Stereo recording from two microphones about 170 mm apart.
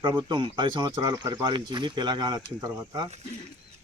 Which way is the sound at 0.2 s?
25° right (ahead or behind).